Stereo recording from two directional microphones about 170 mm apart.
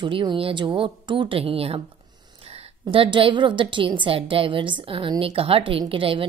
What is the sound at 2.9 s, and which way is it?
A woman's voice, 30° right (ahead or behind).